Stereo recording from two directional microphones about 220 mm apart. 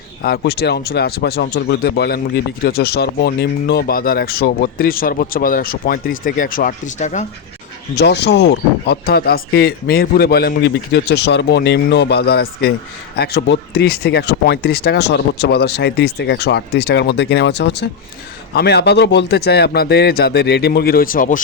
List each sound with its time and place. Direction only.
0.2 s speech: 45° left (ahead or behind)
7.9 s speech: 50° left (ahead or behind)